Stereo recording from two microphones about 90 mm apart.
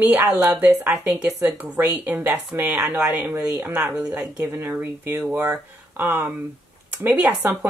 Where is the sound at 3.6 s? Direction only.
10° right (ahead or behind).